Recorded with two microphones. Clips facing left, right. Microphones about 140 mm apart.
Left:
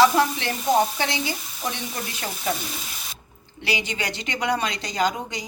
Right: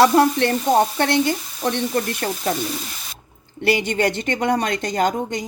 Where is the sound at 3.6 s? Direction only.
55° right (ahead or behind).